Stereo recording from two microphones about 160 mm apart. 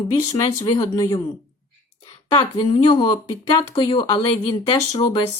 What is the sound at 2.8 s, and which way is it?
Speech, 30° left (ahead or behind).